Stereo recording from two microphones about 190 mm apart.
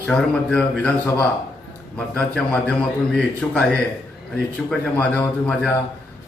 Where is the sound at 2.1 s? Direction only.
5° left (ahead or behind).